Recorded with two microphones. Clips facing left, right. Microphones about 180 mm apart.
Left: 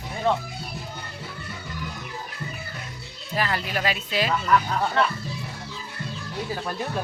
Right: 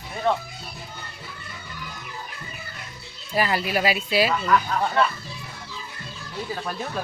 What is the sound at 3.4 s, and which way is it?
Speech, 10° right (ahead or behind).